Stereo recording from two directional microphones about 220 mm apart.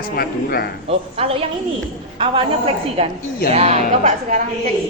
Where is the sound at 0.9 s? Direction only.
25° right (ahead or behind).